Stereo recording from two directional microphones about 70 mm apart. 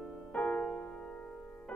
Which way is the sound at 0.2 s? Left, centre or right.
Centre.